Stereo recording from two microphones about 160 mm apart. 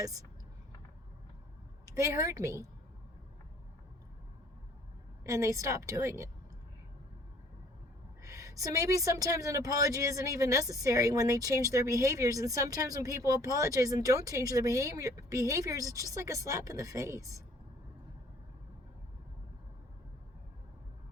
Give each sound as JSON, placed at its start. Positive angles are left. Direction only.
{"t": 0.0, "sound": "a woman's voice", "side_deg": -20}
{"t": 2.0, "sound": "a woman's voice", "side_deg": -20}
{"t": 5.2, "sound": "a woman's voice", "side_deg": -20}
{"t": 8.2, "sound": "a woman's voice", "side_deg": -20}